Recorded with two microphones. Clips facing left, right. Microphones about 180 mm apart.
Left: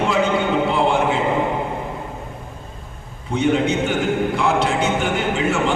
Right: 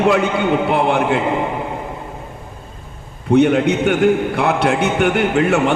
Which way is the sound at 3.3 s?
60° right (ahead or behind).